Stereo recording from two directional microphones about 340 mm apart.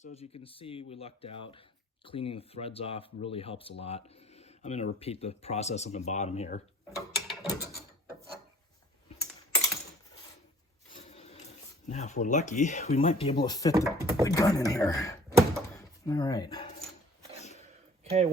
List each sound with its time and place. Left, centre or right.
0.0 s speech: centre
6.9 s gears: centre
10.9 s speech: centre
13.7 s speech: centre
14.3 s speech: centre
15.3 s door: centre
16.0 s speech: centre
18.0 s a sound: centre